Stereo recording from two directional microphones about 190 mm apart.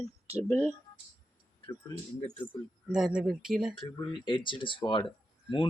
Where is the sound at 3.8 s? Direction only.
25° left (ahead or behind).